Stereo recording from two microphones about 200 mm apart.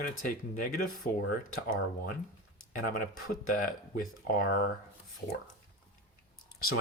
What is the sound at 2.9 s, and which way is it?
Speech, 40° left (ahead or behind).